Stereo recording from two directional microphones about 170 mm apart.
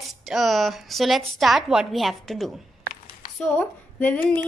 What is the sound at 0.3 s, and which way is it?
A woman's voice, centre (ahead or behind).